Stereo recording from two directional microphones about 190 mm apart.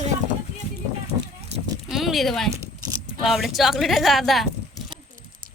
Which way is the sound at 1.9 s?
Centre (ahead or behind).